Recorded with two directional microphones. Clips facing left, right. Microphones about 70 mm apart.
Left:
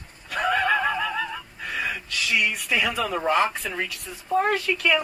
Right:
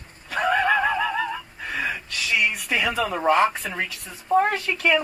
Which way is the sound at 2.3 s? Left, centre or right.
Right.